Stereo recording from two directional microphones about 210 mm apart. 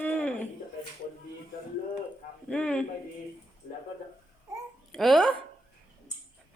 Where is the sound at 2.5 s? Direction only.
5° left (ahead or behind).